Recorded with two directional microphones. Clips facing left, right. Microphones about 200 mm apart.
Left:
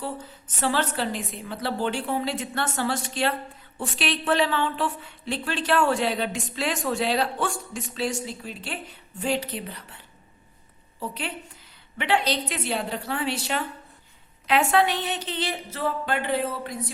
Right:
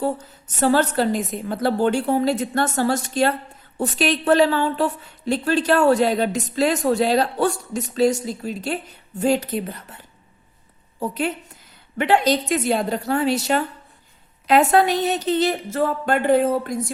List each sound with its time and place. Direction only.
0.0 s a woman's voice: 45° right (ahead or behind)
11.0 s a woman's voice: 45° right (ahead or behind)